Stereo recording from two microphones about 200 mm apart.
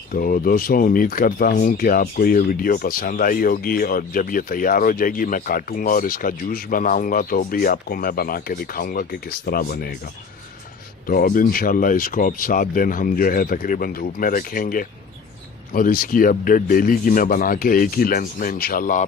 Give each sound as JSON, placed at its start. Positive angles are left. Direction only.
{"t": 0.1, "sound": "speech", "side_deg": 45}
{"t": 11.0, "sound": "speech", "side_deg": 45}